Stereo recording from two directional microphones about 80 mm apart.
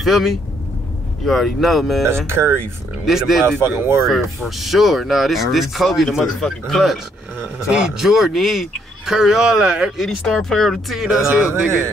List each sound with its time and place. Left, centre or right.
0.0 s speech: centre
2.2 s speech: right
3.1 s speech: centre
3.4 s speech: right
4.0 s speech: centre
10.0 s speech: centre